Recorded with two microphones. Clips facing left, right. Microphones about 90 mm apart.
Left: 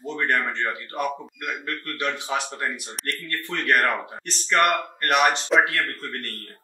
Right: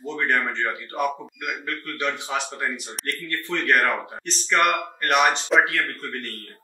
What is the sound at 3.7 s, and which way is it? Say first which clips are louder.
A man's voice: even; 15° right (ahead or behind).